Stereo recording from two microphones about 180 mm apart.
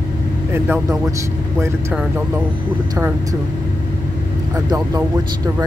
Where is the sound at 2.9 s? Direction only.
20° right (ahead or behind).